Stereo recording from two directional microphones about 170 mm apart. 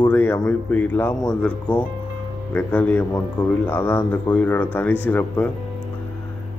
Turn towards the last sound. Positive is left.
turn(degrees=10)  # may be behind; listen again after turning